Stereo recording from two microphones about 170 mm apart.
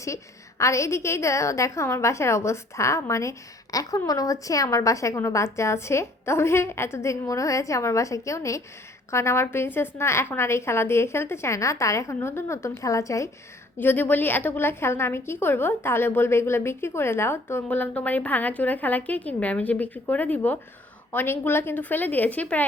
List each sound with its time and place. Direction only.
0.6 s a woman's voice: 15° left (ahead or behind)